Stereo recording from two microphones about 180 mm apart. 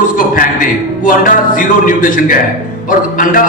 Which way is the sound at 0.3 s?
50° left (ahead or behind).